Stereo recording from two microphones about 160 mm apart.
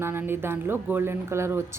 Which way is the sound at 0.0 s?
15° right (ahead or behind).